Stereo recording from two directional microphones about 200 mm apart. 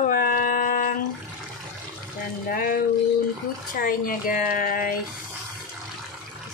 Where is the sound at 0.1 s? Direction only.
45° left (ahead or behind).